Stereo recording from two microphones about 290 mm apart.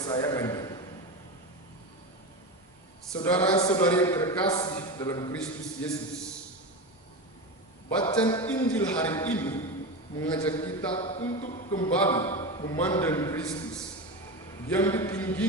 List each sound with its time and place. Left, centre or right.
0.0 s a man's voice: centre
3.2 s a man's voice: centre
8.0 s a man's voice: centre
8.5 s a man's voice: centre
11.9 s a man's voice: centre
12.4 s a sound: centre
12.7 s a man's voice: centre